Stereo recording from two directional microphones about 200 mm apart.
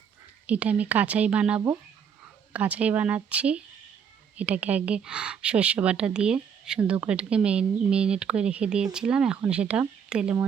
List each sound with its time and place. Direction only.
0.4 s a woman's voice: 5° right (ahead or behind)